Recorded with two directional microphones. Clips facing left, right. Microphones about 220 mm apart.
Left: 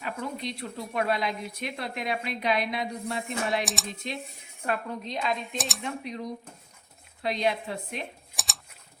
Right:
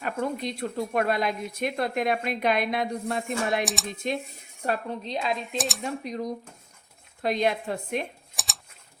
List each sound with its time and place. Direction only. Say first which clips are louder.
0.0 s speech: right 5 dB; 50° right (ahead or behind)
3.6 s speech: right 3 dB; centre (ahead or behind)
4.0 s speech: right 8 dB; 50° right (ahead or behind)
4.6 s a woman's voice: right 2 dB; 35° right (ahead or behind)
5.5 s speech: right 4 dB; centre (ahead or behind)
5.8 s speech: right 3 dB; 45° right (ahead or behind)
8.4 s a sound: right 1 dB; centre (ahead or behind)